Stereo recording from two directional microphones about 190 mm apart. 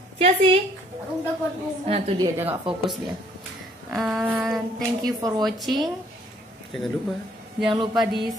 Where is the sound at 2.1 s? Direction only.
15° right (ahead or behind).